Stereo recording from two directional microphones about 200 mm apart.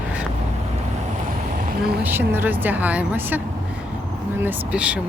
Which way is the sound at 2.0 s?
10° right (ahead or behind).